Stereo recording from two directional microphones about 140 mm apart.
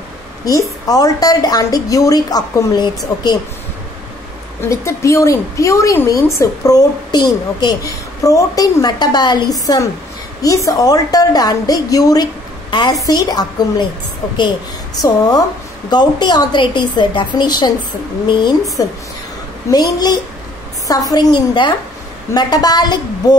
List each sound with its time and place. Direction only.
0.5 s a woman's voice: 25° left (ahead or behind)
4.6 s a woman's voice: 20° left (ahead or behind)
15.0 s a woman's voice: 25° left (ahead or behind)
18.8 s a woman's voice: 25° left (ahead or behind)